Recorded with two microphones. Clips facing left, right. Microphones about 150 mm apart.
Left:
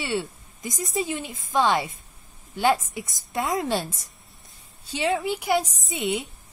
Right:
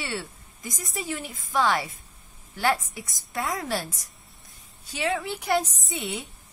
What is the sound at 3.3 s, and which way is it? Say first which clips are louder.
A woman's voice: left 4 dB; 20° left (ahead or behind).